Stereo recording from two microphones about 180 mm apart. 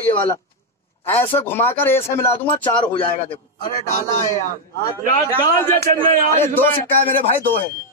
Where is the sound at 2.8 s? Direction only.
30° left (ahead or behind).